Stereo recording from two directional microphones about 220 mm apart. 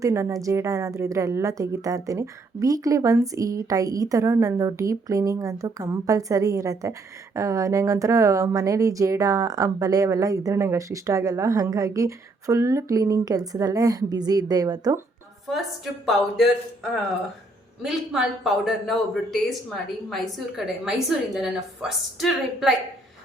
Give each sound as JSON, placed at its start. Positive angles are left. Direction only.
{"t": 0.0, "sound": "speech", "side_deg": -15}
{"t": 15.4, "sound": "a man's voice", "side_deg": 0}
{"t": 17.8, "sound": "a man's voice", "side_deg": 0}